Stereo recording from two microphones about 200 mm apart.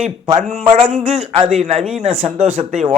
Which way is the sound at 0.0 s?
35° right (ahead or behind).